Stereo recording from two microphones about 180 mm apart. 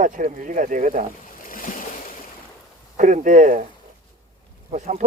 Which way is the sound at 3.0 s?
45° right (ahead or behind).